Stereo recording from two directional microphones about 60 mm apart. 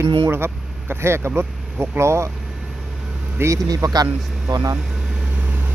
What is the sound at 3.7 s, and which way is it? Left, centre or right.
Speech, right.